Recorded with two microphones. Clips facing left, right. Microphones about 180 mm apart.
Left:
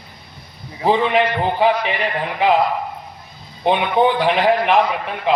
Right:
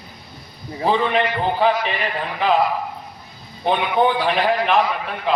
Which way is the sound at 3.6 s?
20° left (ahead or behind).